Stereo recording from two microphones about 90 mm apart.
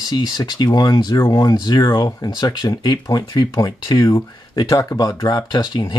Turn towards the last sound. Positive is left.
turn(degrees=55)  # may be behind; listen again after turning